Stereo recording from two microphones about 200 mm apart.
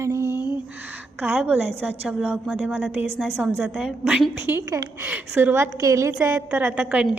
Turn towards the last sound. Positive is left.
turn(degrees=-5)  # may be behind; listen again after turning